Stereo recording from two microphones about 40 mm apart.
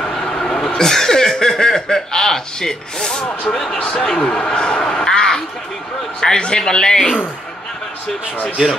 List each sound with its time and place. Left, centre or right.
0.0 s vehicle: centre
0.7 s a man's voice: centre